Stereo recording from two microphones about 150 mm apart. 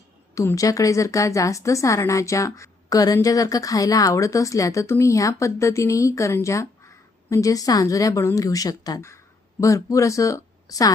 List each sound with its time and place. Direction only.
0.3 s a woman's voice: 20° left (ahead or behind)